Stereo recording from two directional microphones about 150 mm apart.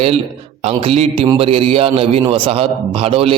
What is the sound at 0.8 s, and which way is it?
A man's voice, 40° right (ahead or behind).